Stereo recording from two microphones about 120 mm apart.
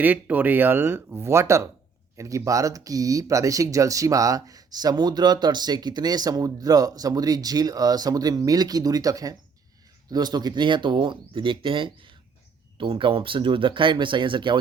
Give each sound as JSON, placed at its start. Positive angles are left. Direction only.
{"t": 0.0, "sound": "speech", "side_deg": -15}